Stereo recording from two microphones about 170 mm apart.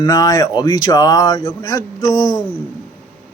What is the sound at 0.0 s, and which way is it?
A man's voice, 20° left (ahead or behind).